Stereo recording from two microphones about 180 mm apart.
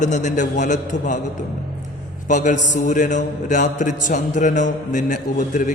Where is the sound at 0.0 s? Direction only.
40° left (ahead or behind).